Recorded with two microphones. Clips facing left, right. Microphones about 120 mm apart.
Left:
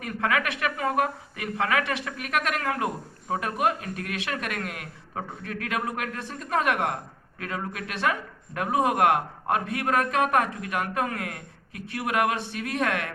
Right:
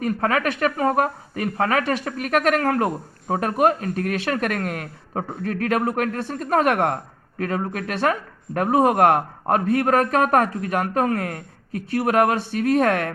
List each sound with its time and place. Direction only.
0.0 s speech: 40° right (ahead or behind)